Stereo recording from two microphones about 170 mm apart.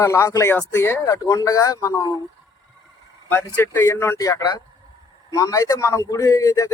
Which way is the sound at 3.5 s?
15° left (ahead or behind).